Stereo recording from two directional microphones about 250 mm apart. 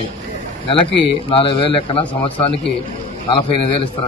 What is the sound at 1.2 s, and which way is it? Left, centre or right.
Speech, left.